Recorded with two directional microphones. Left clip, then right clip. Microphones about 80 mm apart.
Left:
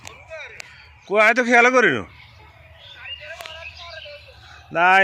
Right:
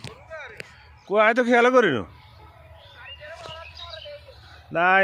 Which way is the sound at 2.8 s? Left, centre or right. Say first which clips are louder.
Left 6 dB; right.